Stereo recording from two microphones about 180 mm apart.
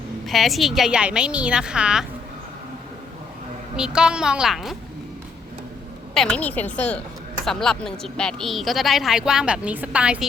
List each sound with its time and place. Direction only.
0.3 s speech: centre (ahead or behind)
3.8 s speech: 5° right (ahead or behind)
6.1 s a woman's voice: 5° left (ahead or behind)